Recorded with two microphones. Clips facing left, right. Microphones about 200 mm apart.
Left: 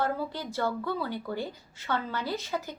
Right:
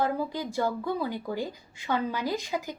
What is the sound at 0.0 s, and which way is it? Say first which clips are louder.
Speech: right 2 dB; 10° right (ahead or behind).